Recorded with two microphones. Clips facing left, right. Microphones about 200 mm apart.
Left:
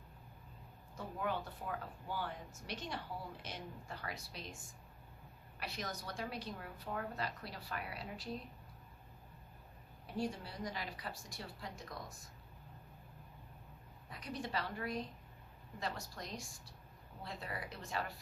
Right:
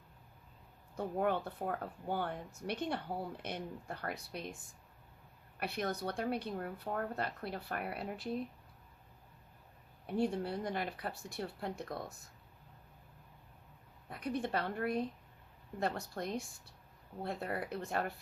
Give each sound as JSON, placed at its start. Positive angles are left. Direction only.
{"t": 0.9, "sound": "speech", "side_deg": -55}
{"t": 5.5, "sound": "speech", "side_deg": -60}
{"t": 10.1, "sound": "speech", "side_deg": -55}
{"t": 14.1, "sound": "speech", "side_deg": -55}